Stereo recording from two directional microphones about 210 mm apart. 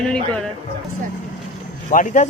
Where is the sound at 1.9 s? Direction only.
35° left (ahead or behind).